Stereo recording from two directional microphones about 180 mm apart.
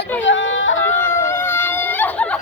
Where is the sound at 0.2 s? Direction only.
90° left.